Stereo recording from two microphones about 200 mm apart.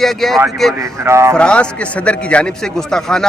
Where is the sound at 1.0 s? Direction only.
15° right (ahead or behind).